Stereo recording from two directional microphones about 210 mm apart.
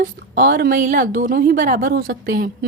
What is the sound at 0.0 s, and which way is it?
A woman's voice, 45° right (ahead or behind).